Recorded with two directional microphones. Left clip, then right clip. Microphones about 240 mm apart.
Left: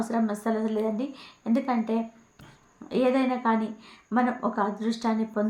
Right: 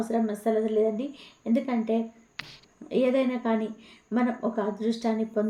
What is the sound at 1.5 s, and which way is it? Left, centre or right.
Speech, left.